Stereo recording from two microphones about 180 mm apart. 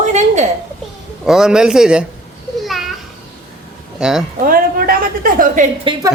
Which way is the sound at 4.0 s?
5° right (ahead or behind).